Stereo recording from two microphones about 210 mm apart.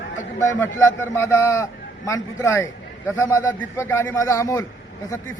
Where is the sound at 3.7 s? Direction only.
10° left (ahead or behind).